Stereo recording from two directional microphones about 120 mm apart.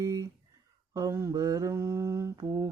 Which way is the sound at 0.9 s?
25° right (ahead or behind).